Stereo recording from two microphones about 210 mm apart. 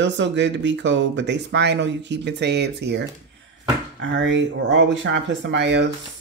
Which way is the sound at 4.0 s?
60° right (ahead or behind).